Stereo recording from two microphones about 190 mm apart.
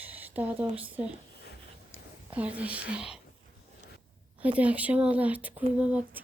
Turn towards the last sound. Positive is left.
turn(degrees=-5)  # may be behind; listen again after turning